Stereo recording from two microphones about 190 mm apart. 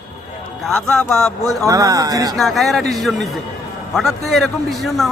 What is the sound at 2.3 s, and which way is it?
Speech, centre (ahead or behind).